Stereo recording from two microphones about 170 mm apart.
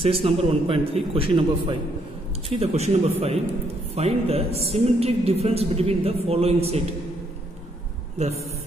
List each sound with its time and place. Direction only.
0.0 s a man's voice: 35° right (ahead or behind)
8.2 s a man's voice: 40° right (ahead or behind)